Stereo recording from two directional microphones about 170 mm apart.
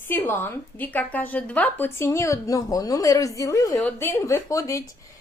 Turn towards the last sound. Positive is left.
turn(degrees=20)  # may be behind; listen again after turning